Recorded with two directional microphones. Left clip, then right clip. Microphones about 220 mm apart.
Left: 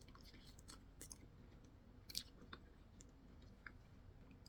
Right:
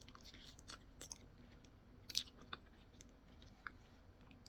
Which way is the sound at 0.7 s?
10° left (ahead or behind).